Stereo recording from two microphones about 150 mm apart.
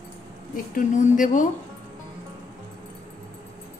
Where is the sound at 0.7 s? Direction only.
60° left (ahead or behind).